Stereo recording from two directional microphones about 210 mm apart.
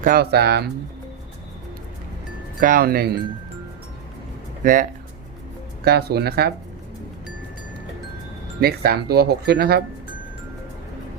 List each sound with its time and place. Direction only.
0.0 s speech: 45° right (ahead or behind)
2.6 s speech: 40° right (ahead or behind)
4.6 s speech: 40° right (ahead or behind)
5.8 s speech: 50° right (ahead or behind)
8.6 s speech: 45° right (ahead or behind)